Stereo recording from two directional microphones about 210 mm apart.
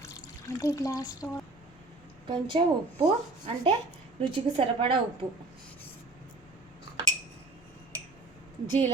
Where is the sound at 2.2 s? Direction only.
25° right (ahead or behind).